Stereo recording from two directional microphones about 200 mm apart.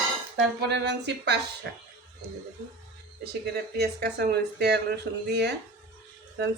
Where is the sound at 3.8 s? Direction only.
55° right (ahead or behind).